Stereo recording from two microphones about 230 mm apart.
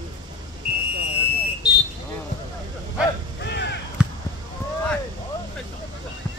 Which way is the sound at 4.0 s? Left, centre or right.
Centre.